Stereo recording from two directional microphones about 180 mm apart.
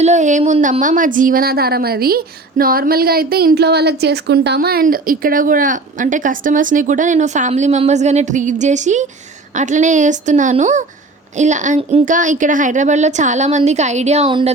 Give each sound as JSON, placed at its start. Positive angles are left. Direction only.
{"t": 0.0, "sound": "a woman's voice", "side_deg": -40}